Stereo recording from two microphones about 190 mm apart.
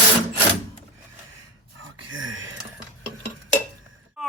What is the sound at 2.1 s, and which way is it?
Whispering, 90° right.